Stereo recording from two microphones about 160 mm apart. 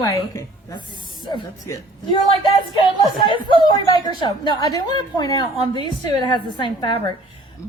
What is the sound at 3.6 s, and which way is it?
A woman's voice, 30° left (ahead or behind).